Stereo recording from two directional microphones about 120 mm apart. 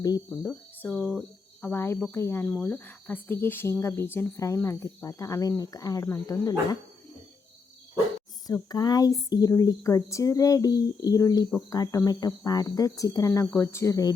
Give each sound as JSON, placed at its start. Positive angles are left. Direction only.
{"t": 0.3, "sound": "speech", "side_deg": 15}
{"t": 1.6, "sound": "a woman's voice", "side_deg": 20}
{"t": 8.7, "sound": "a woman's voice", "side_deg": 35}